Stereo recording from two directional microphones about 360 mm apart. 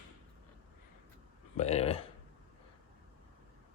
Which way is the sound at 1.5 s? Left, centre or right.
Centre.